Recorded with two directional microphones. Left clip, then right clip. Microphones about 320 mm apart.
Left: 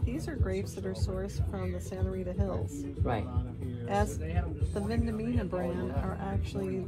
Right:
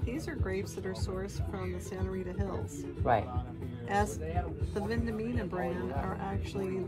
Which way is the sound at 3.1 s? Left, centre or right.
Centre.